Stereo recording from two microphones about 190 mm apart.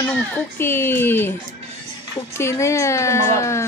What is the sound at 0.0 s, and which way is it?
Speech, 10° left (ahead or behind).